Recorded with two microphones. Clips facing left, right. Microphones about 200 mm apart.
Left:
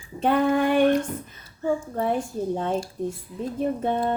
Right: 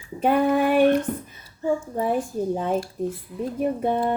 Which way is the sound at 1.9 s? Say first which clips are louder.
Right 1 dB; 10° right (ahead or behind).